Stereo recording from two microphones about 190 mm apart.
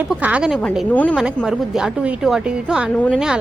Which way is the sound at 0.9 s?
10° left (ahead or behind).